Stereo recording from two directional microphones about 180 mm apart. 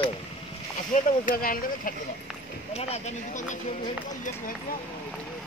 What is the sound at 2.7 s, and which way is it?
Speech, 40° left (ahead or behind).